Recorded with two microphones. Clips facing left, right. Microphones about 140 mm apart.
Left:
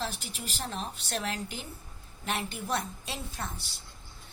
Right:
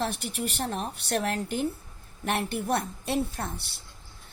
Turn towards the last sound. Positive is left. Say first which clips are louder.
# right 4 dB
turn(degrees=-60)  # may be behind; listen again after turning